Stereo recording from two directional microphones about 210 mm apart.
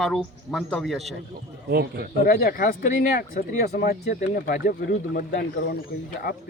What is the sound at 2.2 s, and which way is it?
Speech, 40° left (ahead or behind).